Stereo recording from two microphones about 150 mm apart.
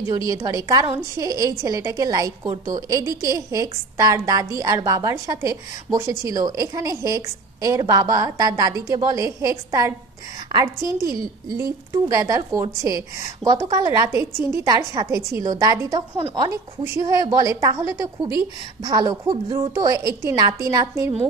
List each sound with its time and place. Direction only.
0.3 s a woman's voice: 20° right (ahead or behind)
19.7 s a woman's voice: 25° right (ahead or behind)